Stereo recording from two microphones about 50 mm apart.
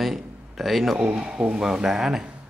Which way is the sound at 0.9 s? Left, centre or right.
Right.